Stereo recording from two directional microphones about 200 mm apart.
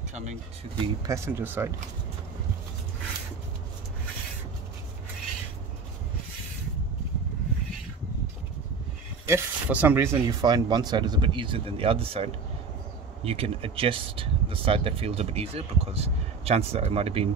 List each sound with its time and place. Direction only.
0.1 s speech: 35° right (ahead or behind)
1.0 s speech: 15° right (ahead or behind)
9.3 s speech: 10° right (ahead or behind); by 17.3 s 30° right (ahead or behind)